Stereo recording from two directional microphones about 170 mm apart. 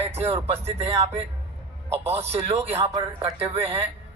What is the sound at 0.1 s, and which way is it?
Speech, 35° right (ahead or behind).